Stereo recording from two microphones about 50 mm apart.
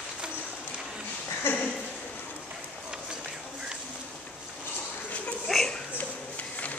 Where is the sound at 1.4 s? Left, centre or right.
Left.